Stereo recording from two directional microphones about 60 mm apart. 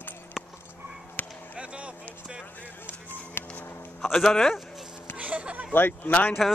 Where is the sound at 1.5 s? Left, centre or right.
Centre.